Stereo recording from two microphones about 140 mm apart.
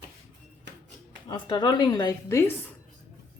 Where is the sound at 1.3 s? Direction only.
35° left (ahead or behind).